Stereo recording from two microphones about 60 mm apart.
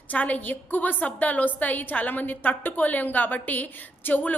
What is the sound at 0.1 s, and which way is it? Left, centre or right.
A woman's voice, left.